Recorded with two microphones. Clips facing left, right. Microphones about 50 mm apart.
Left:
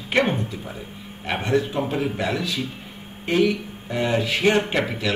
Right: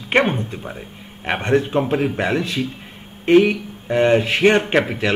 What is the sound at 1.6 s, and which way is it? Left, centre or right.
Speech, right.